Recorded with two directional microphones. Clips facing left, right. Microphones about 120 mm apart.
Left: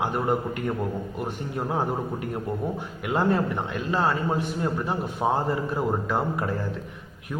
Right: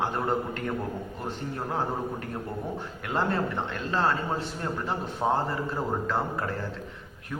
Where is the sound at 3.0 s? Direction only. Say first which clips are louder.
Left 4 dB; 15° left (ahead or behind).